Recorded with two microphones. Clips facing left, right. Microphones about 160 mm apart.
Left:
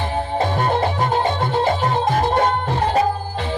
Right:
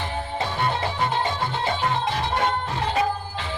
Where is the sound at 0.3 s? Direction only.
50° left (ahead or behind).